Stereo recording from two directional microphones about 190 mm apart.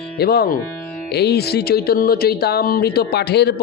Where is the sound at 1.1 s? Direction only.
60° left (ahead or behind).